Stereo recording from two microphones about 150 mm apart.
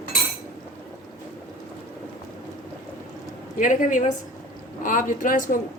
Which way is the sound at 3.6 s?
60° left (ahead or behind).